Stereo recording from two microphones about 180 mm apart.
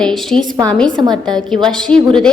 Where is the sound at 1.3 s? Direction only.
25° right (ahead or behind).